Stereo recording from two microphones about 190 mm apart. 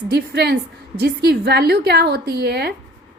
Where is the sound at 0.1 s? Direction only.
60° right (ahead or behind).